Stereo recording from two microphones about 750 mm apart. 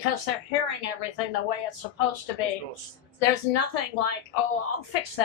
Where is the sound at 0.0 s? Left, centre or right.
Left.